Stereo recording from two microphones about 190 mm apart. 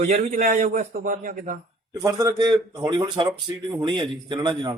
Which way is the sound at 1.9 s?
20° right (ahead or behind).